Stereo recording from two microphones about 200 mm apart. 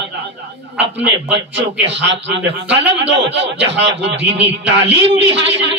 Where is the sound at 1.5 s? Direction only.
65° right (ahead or behind).